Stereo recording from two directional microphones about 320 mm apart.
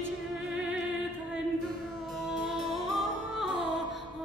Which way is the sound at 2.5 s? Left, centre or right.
Centre.